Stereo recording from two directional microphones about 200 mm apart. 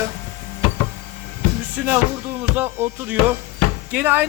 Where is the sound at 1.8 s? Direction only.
10° right (ahead or behind).